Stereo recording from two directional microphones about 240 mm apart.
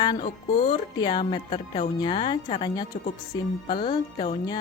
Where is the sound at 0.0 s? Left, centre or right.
Centre.